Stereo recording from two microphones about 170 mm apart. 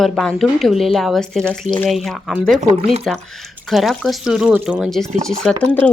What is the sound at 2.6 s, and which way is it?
Speech, 45° right (ahead or behind).